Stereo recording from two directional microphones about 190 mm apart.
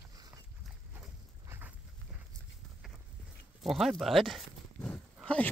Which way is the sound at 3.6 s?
Centre (ahead or behind).